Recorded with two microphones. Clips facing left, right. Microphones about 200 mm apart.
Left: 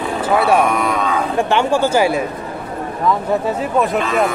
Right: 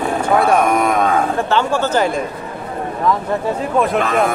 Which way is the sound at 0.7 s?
45° right (ahead or behind).